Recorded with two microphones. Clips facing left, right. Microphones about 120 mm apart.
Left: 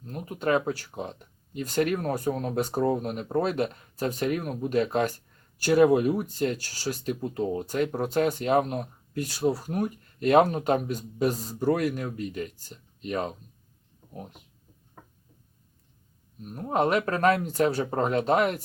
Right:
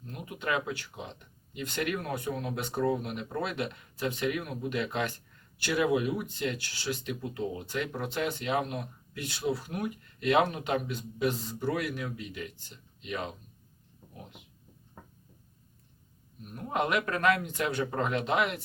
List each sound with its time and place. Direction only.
0.0 s speech: 40° left (ahead or behind)
16.6 s speech: 35° left (ahead or behind)